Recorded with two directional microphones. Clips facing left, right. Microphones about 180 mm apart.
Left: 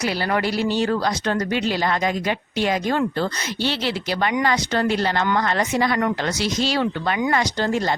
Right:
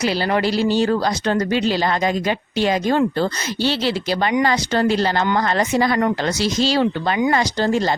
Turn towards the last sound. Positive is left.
turn(degrees=-30)  # may be behind; listen again after turning